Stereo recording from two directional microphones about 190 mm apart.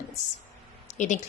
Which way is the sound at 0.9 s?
40° left (ahead or behind).